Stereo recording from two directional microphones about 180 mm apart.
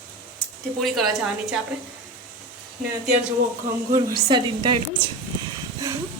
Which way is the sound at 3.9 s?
20° right (ahead or behind).